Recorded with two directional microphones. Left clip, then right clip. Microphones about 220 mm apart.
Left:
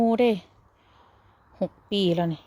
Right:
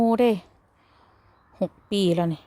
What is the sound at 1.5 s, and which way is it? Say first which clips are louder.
Speech: right 1 dB; 15° right (ahead or behind).